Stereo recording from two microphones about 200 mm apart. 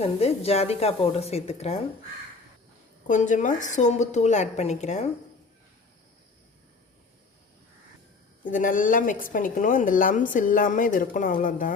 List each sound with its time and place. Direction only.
0.0 s a woman's voice: 30° left (ahead or behind)
3.1 s a woman's voice: 40° left (ahead or behind)
8.4 s a woman's voice: 40° left (ahead or behind)